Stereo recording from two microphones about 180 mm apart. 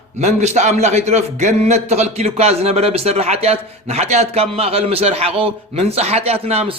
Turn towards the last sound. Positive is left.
turn(degrees=-35)  # may be behind; listen again after turning